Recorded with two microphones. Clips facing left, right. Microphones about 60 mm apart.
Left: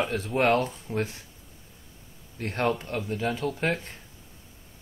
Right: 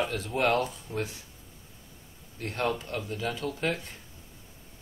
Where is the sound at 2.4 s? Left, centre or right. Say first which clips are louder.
Left 3 dB; left.